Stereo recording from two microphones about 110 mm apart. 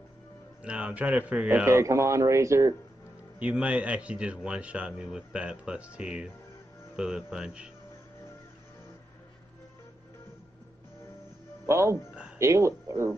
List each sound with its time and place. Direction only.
0.7 s a man's voice: 10° right (ahead or behind)
1.7 s speech: 25° right (ahead or behind)
3.3 s a man's voice: 10° right (ahead or behind)
11.6 s music: 25° right (ahead or behind)
12.1 s a sound: 10° right (ahead or behind)
12.4 s speech: 25° right (ahead or behind)